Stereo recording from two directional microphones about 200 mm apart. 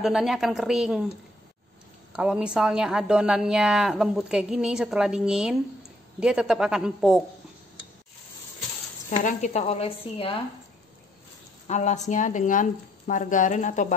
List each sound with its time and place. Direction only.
0.0 s a woman's voice: centre (ahead or behind)
2.1 s a woman's voice: 5° right (ahead or behind)
9.2 s speech: 35° left (ahead or behind)
11.6 s speech: 35° left (ahead or behind)